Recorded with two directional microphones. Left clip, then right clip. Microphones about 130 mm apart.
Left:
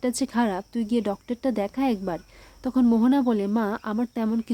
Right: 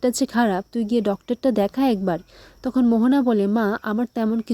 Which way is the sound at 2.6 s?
25° right (ahead or behind).